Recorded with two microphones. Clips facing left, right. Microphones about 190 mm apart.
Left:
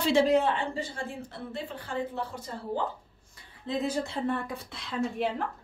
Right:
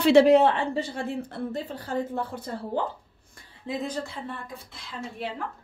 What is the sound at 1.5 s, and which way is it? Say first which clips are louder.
Speech: right 4 dB; 40° right (ahead or behind).